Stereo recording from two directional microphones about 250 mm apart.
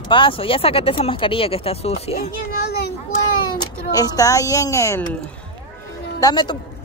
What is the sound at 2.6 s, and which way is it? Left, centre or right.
Children playing, left.